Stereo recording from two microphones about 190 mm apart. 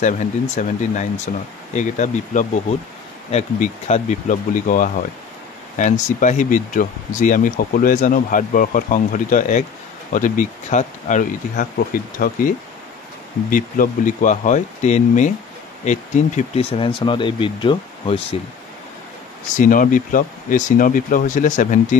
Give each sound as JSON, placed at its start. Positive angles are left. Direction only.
{"t": 0.6, "sound": "speech", "side_deg": 40}
{"t": 19.5, "sound": "speech", "side_deg": 45}